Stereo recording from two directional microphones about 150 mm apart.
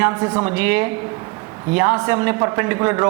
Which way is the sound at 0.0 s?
15° right (ahead or behind).